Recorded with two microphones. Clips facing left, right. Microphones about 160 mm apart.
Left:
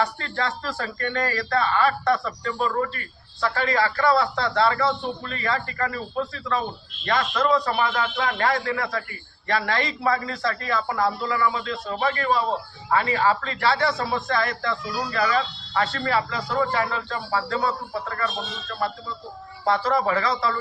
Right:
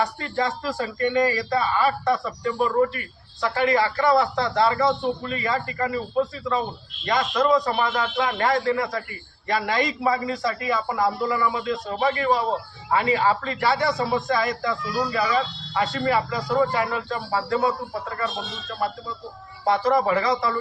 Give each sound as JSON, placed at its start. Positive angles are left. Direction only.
{"t": 0.0, "sound": "a man's voice", "side_deg": -15}
{"t": 19.6, "sound": "a man's voice", "side_deg": -15}